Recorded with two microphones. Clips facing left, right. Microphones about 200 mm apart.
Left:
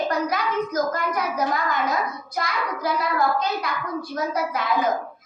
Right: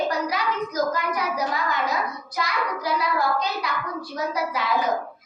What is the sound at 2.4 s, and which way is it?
A child's voice, 50° left (ahead or behind).